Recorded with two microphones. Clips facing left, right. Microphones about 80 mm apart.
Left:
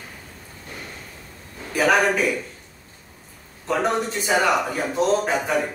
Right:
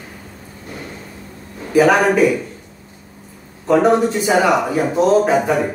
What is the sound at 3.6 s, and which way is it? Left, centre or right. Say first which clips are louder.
A man's voice: right 9 dB; centre.